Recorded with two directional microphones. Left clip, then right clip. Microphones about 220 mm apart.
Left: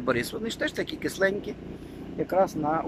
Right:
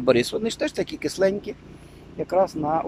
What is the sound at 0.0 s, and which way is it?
Speech, 15° right (ahead or behind).